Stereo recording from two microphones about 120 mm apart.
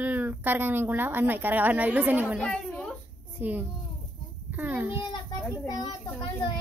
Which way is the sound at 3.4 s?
15° right (ahead or behind).